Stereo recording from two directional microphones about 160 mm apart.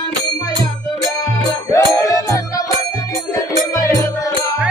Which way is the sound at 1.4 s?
20° left (ahead or behind).